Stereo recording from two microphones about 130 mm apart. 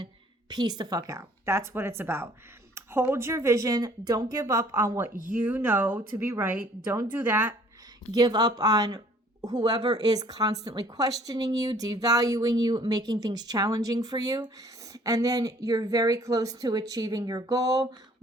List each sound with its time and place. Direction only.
0.5 s speech: 35° right (ahead or behind)
5.3 s speech: 15° right (ahead or behind)
8.1 s speech: 30° right (ahead or behind)